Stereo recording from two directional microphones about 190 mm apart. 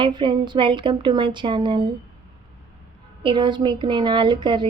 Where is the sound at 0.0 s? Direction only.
25° right (ahead or behind).